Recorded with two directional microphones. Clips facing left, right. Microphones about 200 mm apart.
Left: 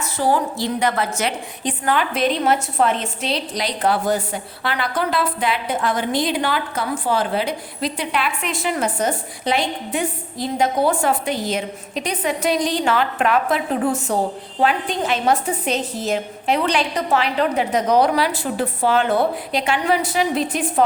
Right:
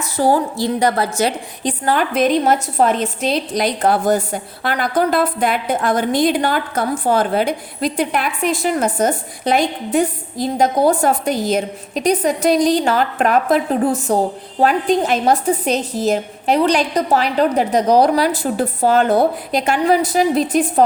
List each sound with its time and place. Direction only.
0.2 s a woman's voice: 40° right (ahead or behind)